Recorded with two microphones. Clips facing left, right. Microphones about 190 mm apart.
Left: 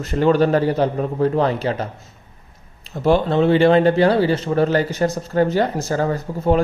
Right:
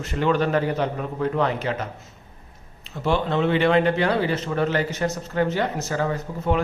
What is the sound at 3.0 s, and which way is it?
Speech, 35° left (ahead or behind).